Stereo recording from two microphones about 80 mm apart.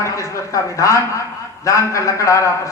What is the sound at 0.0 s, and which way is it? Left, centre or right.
A man's voice, left.